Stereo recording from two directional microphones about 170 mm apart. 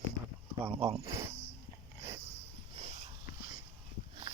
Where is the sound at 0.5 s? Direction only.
10° right (ahead or behind).